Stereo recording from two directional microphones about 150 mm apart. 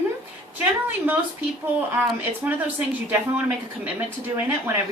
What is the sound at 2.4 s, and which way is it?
Speech, 10° right (ahead or behind).